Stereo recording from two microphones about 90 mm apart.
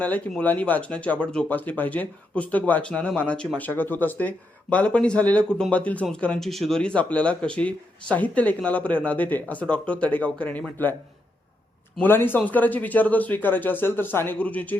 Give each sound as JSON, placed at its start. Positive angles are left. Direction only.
{"t": 0.0, "sound": "speech", "side_deg": 15}
{"t": 3.7, "sound": "speech", "side_deg": 20}
{"t": 6.5, "sound": "speech", "side_deg": 0}
{"t": 11.9, "sound": "speech", "side_deg": 25}